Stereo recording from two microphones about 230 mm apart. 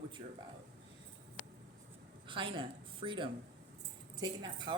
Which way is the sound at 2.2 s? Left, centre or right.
Right.